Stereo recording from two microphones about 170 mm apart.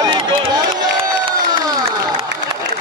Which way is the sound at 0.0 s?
25° right (ahead or behind).